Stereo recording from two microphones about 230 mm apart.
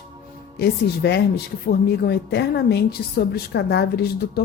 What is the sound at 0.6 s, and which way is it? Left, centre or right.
Speech, left.